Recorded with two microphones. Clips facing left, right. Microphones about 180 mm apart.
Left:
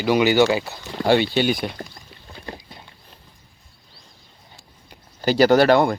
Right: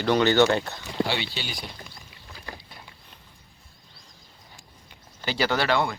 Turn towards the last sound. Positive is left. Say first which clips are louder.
# left 10 dB
turn(degrees=45)  # may be behind; listen again after turning